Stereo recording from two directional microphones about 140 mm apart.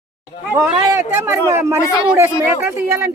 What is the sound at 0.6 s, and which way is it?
Speech, 25° right (ahead or behind).